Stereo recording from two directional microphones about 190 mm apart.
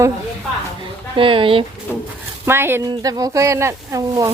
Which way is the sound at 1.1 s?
25° right (ahead or behind).